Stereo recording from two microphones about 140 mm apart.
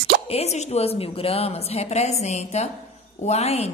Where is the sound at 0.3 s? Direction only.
50° left (ahead or behind).